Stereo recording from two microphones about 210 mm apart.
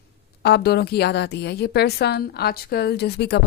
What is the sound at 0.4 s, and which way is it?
A woman's voice, 50° left (ahead or behind).